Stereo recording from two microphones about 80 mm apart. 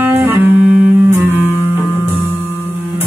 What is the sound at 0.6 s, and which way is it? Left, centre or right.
Music, centre.